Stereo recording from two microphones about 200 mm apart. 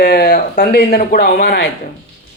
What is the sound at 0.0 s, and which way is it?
Speech, 50° left (ahead or behind).